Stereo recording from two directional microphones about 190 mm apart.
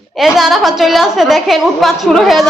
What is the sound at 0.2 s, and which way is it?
A woman's voice, centre (ahead or behind).